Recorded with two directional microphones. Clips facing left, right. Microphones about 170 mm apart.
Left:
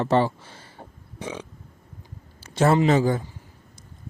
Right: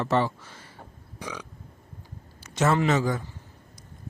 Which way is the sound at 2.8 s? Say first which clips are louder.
Left 4 dB; 30° left (ahead or behind).